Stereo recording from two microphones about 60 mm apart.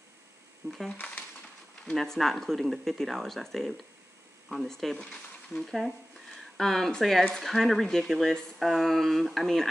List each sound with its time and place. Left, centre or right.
0.7 s speech: centre
0.9 s speech: left
1.9 s speech: centre
4.9 s a sound: centre
5.6 s speech: centre